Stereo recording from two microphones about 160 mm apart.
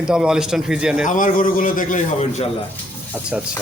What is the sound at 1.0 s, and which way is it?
A man's voice, 55° left (ahead or behind).